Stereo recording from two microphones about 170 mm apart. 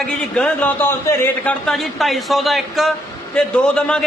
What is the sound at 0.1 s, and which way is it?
Speech, 5° left (ahead or behind).